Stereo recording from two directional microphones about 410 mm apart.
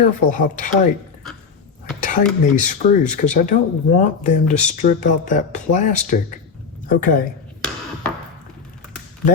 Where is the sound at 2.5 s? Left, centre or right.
Centre.